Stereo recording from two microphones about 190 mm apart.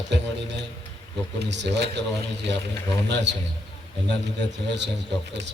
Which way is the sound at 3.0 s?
65° right (ahead or behind).